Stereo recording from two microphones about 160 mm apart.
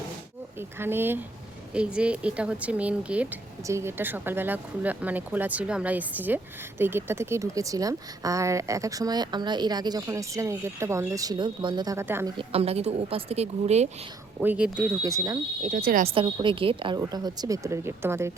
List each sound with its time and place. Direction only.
0.8 s speech: 15° right (ahead or behind)
12.4 s a woman's voice: 40° right (ahead or behind)
14.4 s speech: 10° right (ahead or behind)
15.0 s speech: 20° right (ahead or behind)
15.7 s speech: 60° right (ahead or behind)
16.1 s a woman's voice: 30° right (ahead or behind); by 18.3 s 15° right (ahead or behind)